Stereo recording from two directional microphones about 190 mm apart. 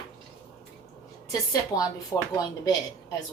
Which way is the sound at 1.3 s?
20° left (ahead or behind).